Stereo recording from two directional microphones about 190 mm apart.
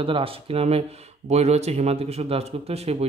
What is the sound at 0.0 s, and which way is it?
Speech, 30° right (ahead or behind).